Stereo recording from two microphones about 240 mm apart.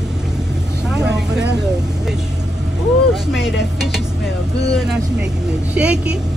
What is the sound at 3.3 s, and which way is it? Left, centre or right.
Speech, centre.